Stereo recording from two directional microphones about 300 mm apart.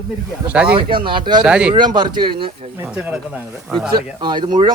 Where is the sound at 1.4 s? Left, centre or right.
Centre.